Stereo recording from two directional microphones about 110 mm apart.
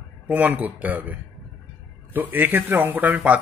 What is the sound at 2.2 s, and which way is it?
Speech, 20° right (ahead or behind).